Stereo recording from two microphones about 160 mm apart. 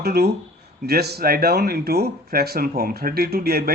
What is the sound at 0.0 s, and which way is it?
Speech, 90° right.